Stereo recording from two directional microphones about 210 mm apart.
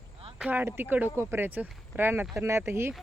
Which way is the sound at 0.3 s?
5° right (ahead or behind).